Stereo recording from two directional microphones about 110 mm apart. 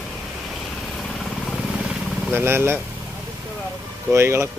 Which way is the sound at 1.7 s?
5° right (ahead or behind).